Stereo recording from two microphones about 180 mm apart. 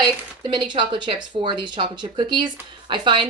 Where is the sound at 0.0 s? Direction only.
25° right (ahead or behind).